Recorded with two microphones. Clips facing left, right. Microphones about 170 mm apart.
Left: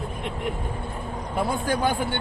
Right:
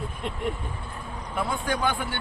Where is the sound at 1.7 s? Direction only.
45° left (ahead or behind).